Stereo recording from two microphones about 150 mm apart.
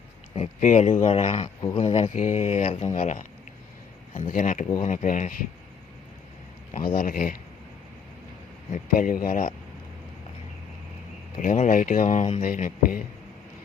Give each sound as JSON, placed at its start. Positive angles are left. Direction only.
{"t": 0.6, "sound": "speech", "side_deg": 55}
{"t": 2.0, "sound": "speech", "side_deg": 55}
{"t": 6.7, "sound": "speech", "side_deg": 70}
{"t": 8.7, "sound": "speech", "side_deg": 60}
{"t": 11.3, "sound": "speech", "side_deg": 55}